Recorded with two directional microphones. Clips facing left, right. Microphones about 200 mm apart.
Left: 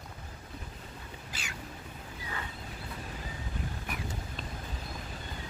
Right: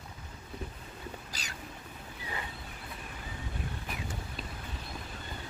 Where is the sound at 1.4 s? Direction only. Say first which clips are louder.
Left 1 dB; 40° right (ahead or behind).